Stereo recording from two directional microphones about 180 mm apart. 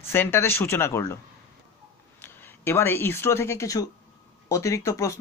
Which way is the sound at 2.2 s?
10° left (ahead or behind).